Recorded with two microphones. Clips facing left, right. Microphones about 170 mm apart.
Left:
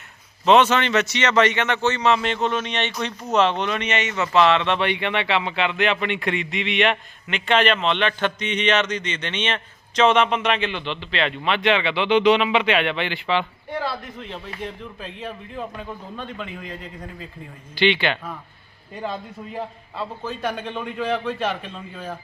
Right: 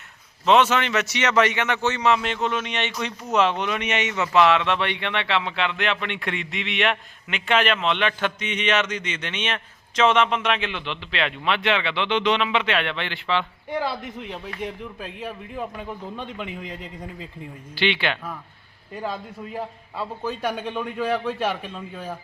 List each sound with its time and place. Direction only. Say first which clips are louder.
0.4 s a man's voice: left 2 dB; centre (ahead or behind)
13.7 s a man's voice: right 1 dB; 15° right (ahead or behind)
17.7 s speech: left 4 dB; 5° right (ahead or behind)
19.5 s a man's voice: left 1 dB; 10° right (ahead or behind)